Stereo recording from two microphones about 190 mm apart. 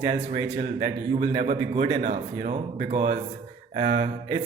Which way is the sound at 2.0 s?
50° right (ahead or behind).